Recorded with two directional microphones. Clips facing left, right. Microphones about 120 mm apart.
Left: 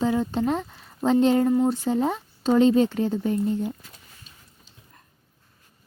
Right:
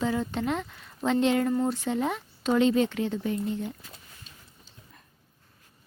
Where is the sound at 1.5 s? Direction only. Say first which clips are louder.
Left 5 dB; 20° left (ahead or behind).